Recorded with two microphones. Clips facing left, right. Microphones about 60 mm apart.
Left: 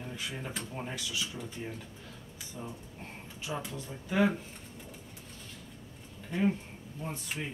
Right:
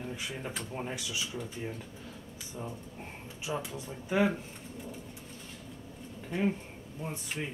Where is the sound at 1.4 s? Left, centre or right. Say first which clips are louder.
Right 2 dB; centre.